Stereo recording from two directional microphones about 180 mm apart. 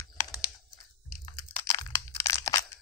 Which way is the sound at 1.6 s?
20° left (ahead or behind).